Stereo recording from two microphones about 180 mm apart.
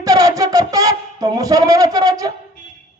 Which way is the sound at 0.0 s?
20° right (ahead or behind).